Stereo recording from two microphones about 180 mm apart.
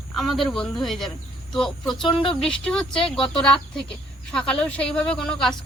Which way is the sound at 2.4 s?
5° left (ahead or behind).